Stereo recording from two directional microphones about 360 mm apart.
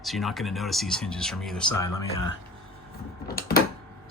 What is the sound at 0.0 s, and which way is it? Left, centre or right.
Speech, centre.